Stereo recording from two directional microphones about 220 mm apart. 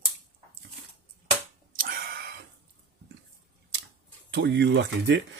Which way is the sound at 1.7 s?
40° right (ahead or behind).